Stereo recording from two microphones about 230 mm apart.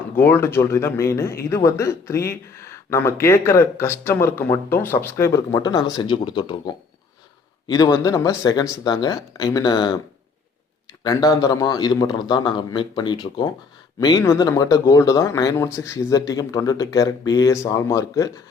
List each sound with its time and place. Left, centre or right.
0.2 s speech: centre
11.0 s speech: centre